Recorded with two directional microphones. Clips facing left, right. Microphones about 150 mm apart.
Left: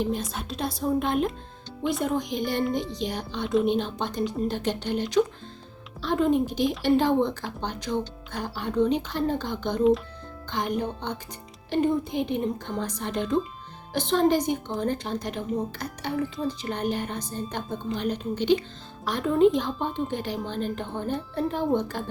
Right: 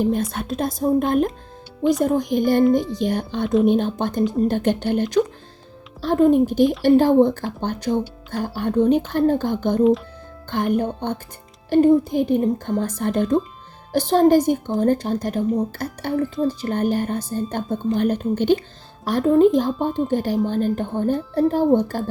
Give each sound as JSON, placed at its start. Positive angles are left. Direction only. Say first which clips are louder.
{"t": 0.0, "sound": "speech", "louder": "right 7 dB", "side_deg": -55}